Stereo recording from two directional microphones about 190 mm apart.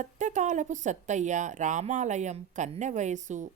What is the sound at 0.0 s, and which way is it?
Speech, 40° right (ahead or behind).